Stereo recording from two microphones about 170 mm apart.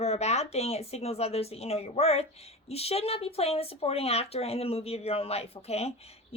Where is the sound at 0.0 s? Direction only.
40° left (ahead or behind).